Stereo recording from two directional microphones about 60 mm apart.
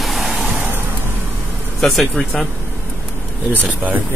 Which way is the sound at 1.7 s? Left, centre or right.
Centre.